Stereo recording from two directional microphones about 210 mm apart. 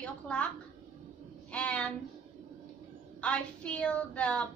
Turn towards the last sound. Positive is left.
turn(degrees=5)  # may be behind; listen again after turning